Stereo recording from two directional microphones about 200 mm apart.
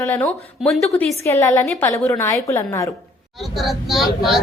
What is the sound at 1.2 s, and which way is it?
A woman's voice, 15° left (ahead or behind).